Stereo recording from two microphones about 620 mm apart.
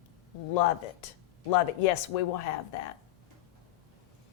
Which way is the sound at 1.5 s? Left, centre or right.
Left.